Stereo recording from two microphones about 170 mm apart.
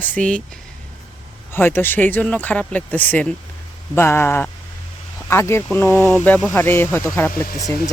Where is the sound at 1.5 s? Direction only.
10° left (ahead or behind).